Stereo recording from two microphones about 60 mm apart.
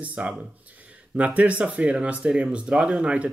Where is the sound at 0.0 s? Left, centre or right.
Right.